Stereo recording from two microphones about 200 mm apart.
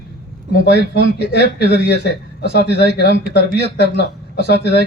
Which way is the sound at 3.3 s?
55° left (ahead or behind).